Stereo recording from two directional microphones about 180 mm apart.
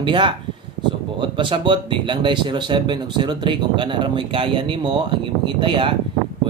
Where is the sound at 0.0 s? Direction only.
25° right (ahead or behind).